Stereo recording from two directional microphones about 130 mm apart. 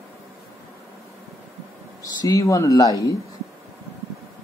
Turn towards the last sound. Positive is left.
turn(degrees=25)  # may be behind; listen again after turning